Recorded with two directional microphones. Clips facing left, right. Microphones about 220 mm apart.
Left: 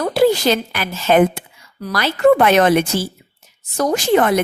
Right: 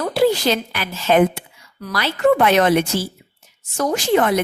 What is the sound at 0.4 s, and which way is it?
A woman's voice, 50° left (ahead or behind).